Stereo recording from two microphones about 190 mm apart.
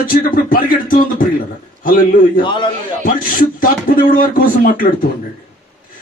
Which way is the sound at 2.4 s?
25° left (ahead or behind).